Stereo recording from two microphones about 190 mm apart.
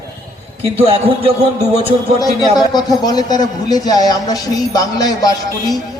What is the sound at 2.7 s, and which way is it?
A man's voice, 20° left (ahead or behind).